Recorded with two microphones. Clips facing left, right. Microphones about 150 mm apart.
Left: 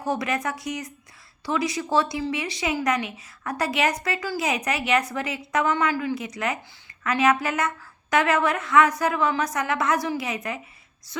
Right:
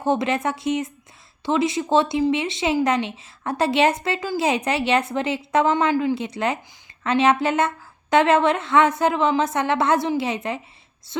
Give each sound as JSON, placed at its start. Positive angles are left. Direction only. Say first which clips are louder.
{"t": 0.0, "sound": "speech", "louder": "right 5 dB", "side_deg": -25}